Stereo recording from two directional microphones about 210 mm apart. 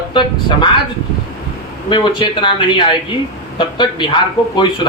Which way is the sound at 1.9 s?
25° left (ahead or behind).